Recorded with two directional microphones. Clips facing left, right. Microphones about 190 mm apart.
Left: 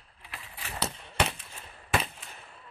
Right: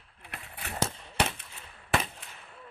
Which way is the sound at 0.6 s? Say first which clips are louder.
Right 3 dB; 45° right (ahead or behind).